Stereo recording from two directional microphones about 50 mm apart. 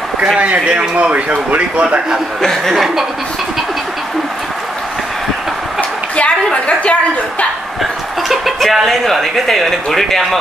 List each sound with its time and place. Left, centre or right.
0.4 s speech: right
2.4 s speech: centre
2.7 s speech: centre
5.8 s a sound: left
8.3 s speech: centre